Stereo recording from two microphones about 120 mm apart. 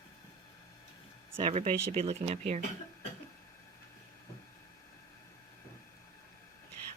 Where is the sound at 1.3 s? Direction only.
55° right (ahead or behind).